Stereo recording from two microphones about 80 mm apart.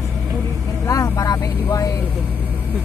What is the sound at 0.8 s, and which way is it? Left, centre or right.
Vehicle, left.